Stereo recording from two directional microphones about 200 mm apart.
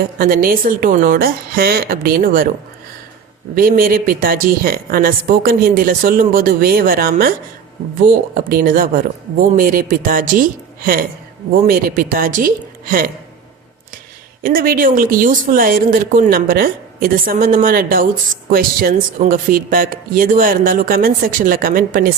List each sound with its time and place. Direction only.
0.2 s a woman's voice: 45° right (ahead or behind)
3.5 s a woman's voice: 45° right (ahead or behind)
14.4 s a woman's voice: 45° right (ahead or behind)